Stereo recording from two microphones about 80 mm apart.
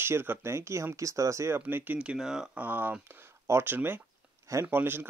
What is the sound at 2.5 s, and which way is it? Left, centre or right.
A man's voice, right.